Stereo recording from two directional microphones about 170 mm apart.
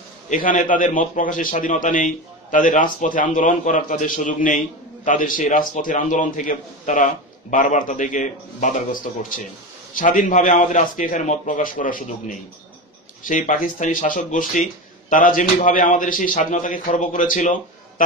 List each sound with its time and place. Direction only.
0.3 s speech: 50° left (ahead or behind)